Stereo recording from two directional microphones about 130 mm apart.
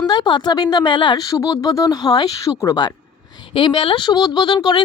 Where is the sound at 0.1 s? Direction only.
35° left (ahead or behind).